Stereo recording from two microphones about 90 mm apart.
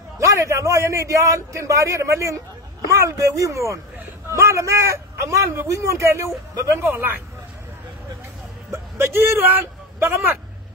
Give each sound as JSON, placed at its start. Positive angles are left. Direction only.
{"t": 0.2, "sound": "a man's voice", "side_deg": -35}
{"t": 6.8, "sound": "a man's voice", "side_deg": -25}
{"t": 8.9, "sound": "a man's voice", "side_deg": -30}